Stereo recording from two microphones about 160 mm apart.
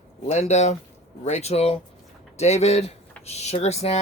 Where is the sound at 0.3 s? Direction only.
45° left (ahead or behind).